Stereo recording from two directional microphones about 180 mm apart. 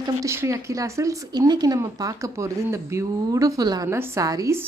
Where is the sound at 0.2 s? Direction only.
15° right (ahead or behind).